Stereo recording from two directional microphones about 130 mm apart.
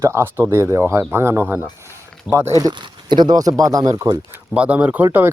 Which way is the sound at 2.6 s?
35° right (ahead or behind).